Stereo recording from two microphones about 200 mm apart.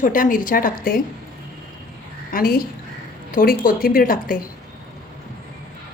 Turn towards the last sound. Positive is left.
turn(degrees=45)  # may be behind; listen again after turning